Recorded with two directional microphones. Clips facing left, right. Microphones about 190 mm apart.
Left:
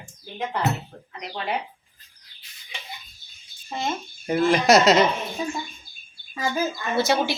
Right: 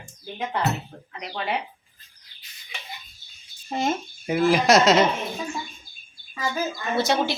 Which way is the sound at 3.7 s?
40° right (ahead or behind).